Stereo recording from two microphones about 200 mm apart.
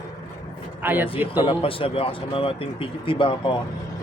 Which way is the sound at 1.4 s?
25° left (ahead or behind).